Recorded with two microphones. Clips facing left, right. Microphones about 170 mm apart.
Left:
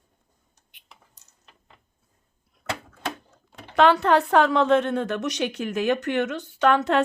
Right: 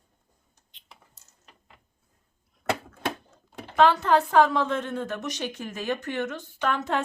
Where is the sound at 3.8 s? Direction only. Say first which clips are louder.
Left 2 dB; 70° left (ahead or behind).